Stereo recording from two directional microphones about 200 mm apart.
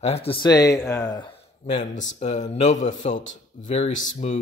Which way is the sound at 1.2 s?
30° left (ahead or behind).